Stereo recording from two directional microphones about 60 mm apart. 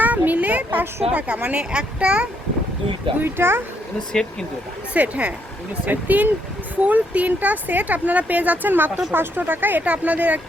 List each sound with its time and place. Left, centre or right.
0.0 s a child's voice: right
3.2 s speech: right
4.1 s speech: centre
4.9 s speech: right
9.8 s speech: right